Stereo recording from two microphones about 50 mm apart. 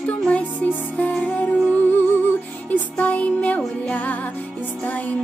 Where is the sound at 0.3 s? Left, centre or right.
Left.